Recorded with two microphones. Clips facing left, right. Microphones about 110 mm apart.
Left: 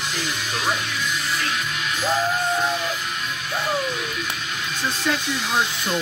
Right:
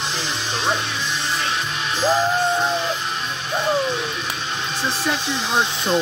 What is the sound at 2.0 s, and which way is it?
Music, 25° right (ahead or behind).